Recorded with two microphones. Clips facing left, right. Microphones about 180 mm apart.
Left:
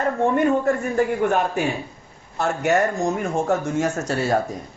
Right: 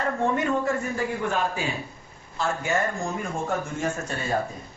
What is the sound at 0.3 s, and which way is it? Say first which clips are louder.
A man's voice: left 6 dB; 55° left (ahead or behind).